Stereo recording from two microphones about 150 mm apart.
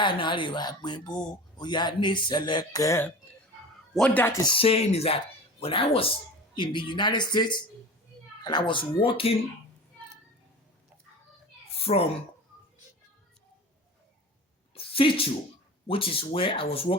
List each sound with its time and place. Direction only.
0.0 s speech: 35° left (ahead or behind)
3.9 s speech: 5° left (ahead or behind)
4.4 s speech: 40° left (ahead or behind)
11.8 s a child's voice: 40° left (ahead or behind)
14.8 s a sound: 35° left (ahead or behind)
15.9 s speech: 35° left (ahead or behind)